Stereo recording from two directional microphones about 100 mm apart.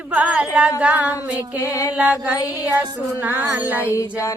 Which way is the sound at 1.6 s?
30° left (ahead or behind).